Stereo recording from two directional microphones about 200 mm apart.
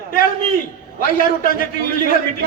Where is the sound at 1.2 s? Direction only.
45° left (ahead or behind).